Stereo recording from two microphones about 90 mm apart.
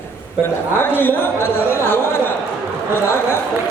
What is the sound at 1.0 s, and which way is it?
A man's voice, 25° left (ahead or behind).